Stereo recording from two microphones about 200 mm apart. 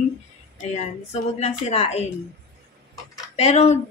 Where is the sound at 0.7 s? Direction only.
35° left (ahead or behind).